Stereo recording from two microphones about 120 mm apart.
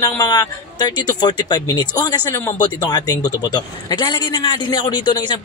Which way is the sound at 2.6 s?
35° left (ahead or behind).